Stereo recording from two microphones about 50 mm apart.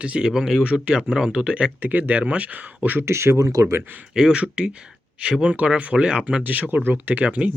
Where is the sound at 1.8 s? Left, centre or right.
Right.